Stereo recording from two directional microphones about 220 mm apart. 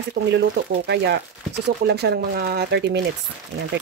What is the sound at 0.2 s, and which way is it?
Speech, 55° right (ahead or behind).